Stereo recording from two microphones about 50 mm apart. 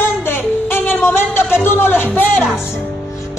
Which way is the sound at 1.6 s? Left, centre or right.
Left.